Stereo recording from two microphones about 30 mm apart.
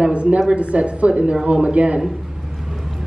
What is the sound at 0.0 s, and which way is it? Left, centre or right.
A woman's voice, right.